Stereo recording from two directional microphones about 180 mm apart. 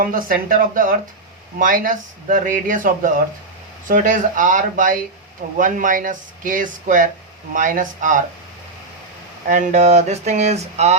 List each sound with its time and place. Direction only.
0.0 s speech: 50° right (ahead or behind)
9.5 s speech: 45° right (ahead or behind)